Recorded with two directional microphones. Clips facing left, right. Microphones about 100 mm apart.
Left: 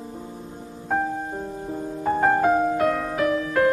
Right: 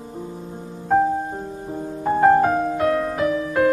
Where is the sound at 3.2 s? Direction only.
20° right (ahead or behind).